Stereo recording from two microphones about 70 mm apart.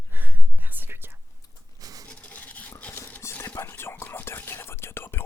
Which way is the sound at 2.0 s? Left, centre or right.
Centre.